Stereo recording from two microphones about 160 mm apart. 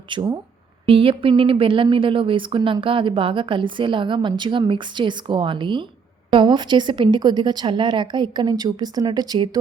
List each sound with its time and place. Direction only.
0.1 s a woman's voice: 30° right (ahead or behind)